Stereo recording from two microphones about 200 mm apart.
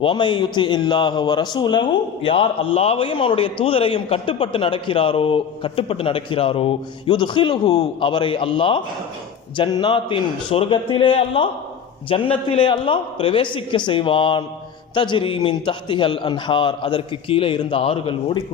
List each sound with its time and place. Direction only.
0.0 s a man's voice: 25° left (ahead or behind)